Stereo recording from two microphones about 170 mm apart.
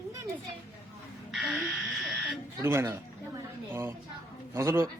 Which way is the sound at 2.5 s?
15° right (ahead or behind).